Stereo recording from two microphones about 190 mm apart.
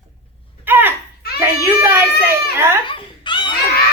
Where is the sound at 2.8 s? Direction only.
25° left (ahead or behind).